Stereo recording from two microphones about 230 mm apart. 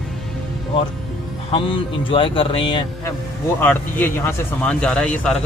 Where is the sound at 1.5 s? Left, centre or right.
Left.